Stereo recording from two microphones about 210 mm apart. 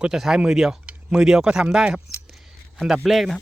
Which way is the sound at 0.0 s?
Centre (ahead or behind).